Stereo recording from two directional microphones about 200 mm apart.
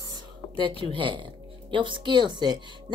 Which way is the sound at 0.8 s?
25° right (ahead or behind).